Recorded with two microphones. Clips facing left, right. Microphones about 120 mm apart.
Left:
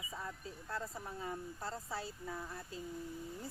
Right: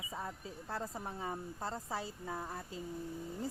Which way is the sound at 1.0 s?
30° right (ahead or behind).